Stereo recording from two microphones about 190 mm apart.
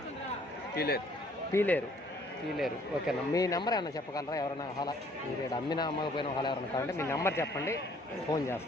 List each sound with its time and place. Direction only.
0.8 s a man's voice: 55° left (ahead or behind)
1.5 s speech: 10° left (ahead or behind)
2.6 s a man's voice: centre (ahead or behind)
3.3 s a man's voice: 20° left (ahead or behind)
6.9 s speech: 15° left (ahead or behind)